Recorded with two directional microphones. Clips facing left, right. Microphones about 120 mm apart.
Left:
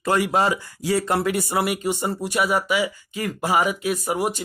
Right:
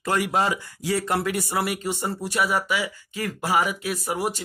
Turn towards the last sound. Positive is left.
turn(degrees=20)  # may be behind; listen again after turning